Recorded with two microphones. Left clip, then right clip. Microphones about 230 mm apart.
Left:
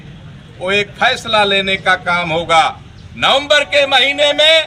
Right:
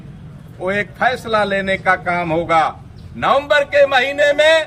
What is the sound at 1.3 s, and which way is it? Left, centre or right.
A man's voice, right.